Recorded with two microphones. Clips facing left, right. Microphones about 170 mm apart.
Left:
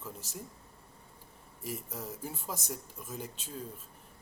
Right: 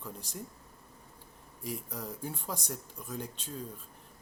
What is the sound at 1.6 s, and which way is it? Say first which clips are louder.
Speech: right 1 dB; 5° left (ahead or behind).